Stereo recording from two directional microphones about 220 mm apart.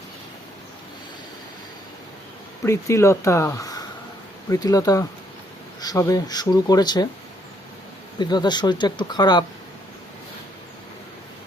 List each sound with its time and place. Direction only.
2.6 s speech: 15° left (ahead or behind)
8.2 s speech: 20° left (ahead or behind)